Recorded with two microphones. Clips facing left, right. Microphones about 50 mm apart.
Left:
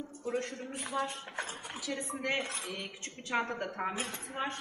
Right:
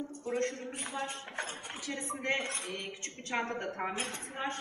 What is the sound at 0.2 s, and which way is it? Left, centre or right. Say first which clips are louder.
A woman's voice: right 1 dB; right.